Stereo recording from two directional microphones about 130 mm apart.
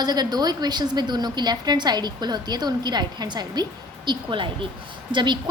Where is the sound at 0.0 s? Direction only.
30° right (ahead or behind).